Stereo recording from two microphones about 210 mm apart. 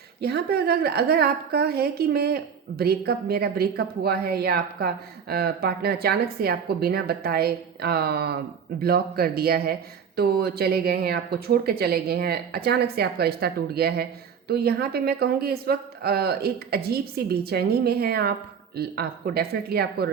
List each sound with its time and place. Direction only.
0.2 s speech: 50° right (ahead or behind)